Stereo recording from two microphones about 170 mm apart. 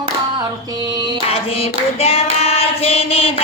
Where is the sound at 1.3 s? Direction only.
35° left (ahead or behind).